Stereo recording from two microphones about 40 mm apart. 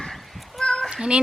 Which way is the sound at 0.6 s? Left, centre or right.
Centre.